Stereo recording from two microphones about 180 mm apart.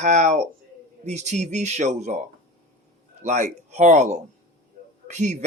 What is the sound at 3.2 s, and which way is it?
A man's voice, 40° right (ahead or behind).